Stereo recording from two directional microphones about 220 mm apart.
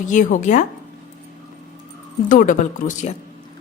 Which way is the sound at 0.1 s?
35° left (ahead or behind).